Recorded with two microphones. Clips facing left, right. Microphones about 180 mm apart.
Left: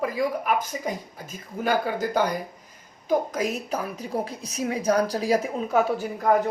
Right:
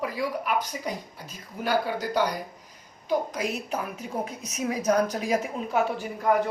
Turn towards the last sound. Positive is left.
turn(degrees=45)  # may be behind; listen again after turning